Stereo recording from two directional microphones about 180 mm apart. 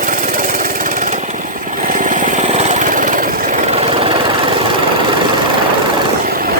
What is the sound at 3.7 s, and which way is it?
Vehicle, 35° right (ahead or behind).